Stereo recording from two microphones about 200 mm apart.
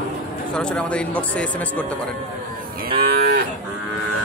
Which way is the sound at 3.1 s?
50° right (ahead or behind).